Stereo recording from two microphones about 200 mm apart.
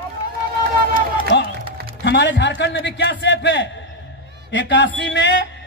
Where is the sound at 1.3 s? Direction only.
60° left (ahead or behind).